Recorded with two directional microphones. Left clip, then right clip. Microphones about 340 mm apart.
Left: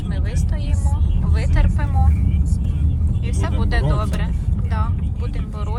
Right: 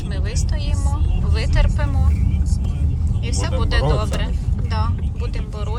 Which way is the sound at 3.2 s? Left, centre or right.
Centre.